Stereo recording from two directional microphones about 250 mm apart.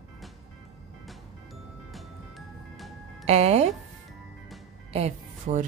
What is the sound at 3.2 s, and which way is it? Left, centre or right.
Speech, right.